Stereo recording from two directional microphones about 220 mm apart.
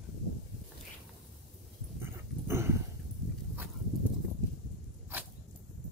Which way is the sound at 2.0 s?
10° right (ahead or behind).